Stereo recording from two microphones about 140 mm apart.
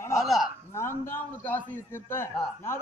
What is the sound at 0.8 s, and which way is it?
A man's voice, 15° left (ahead or behind).